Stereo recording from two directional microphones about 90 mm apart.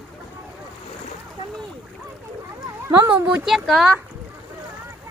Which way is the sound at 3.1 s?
15° right (ahead or behind).